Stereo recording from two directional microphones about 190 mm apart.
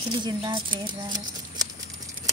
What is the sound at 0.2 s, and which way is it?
Speech, 25° right (ahead or behind).